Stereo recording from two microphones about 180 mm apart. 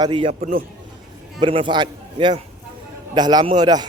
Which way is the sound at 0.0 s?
30° right (ahead or behind).